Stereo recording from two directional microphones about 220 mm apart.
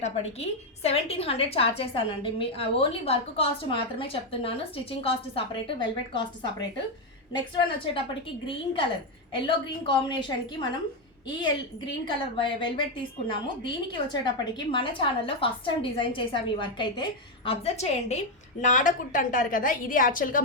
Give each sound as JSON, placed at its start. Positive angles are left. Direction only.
{"t": 0.0, "sound": "a woman's voice", "side_deg": 30}
{"t": 8.4, "sound": "a woman's voice", "side_deg": 25}